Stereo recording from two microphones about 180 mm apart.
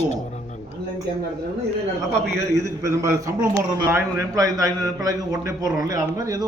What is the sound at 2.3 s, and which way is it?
A man's voice, 15° right (ahead or behind).